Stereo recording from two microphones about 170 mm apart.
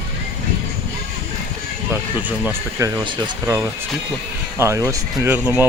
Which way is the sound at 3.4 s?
10° right (ahead or behind).